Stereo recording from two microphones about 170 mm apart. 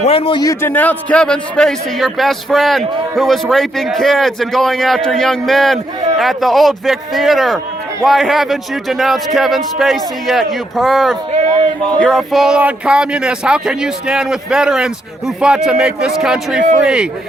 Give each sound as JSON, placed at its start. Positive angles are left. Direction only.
{"t": 0.0, "sound": "a man's voice", "side_deg": 35}
{"t": 0.4, "sound": "a man's voice", "side_deg": 10}